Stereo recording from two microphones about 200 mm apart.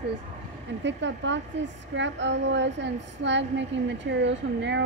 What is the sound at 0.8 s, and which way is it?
A woman's voice, 65° right (ahead or behind).